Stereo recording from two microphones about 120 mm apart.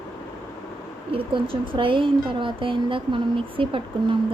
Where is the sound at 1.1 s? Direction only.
45° right (ahead or behind).